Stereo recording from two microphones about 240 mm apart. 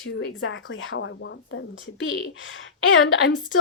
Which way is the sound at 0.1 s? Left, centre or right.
Left.